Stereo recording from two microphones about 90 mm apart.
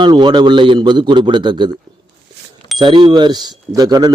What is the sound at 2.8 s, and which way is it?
Speech, 60° right (ahead or behind).